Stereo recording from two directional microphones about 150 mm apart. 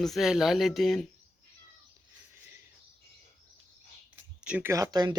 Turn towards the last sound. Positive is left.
turn(degrees=-25)  # may be behind; listen again after turning